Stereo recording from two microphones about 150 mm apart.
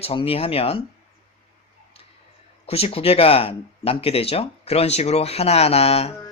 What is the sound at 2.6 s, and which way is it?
Speech, 40° left (ahead or behind).